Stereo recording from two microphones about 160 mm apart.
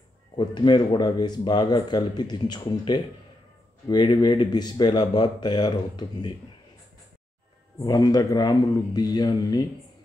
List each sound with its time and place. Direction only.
0.4 s speech: 30° left (ahead or behind)
7.8 s speech: 25° left (ahead or behind)